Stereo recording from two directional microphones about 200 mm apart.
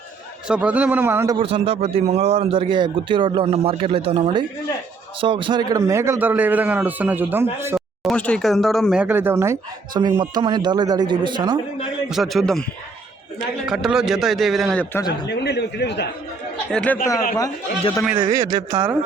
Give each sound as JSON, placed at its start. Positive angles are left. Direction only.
{"t": 0.4, "sound": "a man's voice", "side_deg": -5}
{"t": 1.4, "sound": "a man's voice", "side_deg": -30}
{"t": 8.0, "sound": "speech", "side_deg": 5}
{"t": 12.0, "sound": "a man's voice", "side_deg": 0}
{"t": 15.3, "sound": "a man's voice", "side_deg": 55}
{"t": 16.7, "sound": "speech", "side_deg": 5}
{"t": 17.3, "sound": "speech", "side_deg": 15}
{"t": 18.4, "sound": "a man's voice", "side_deg": -15}